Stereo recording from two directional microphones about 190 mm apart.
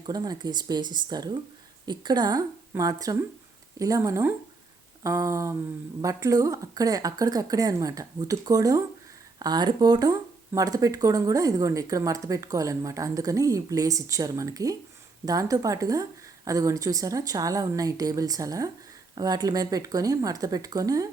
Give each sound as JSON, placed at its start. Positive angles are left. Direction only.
{"t": 0.0, "sound": "speech", "side_deg": -20}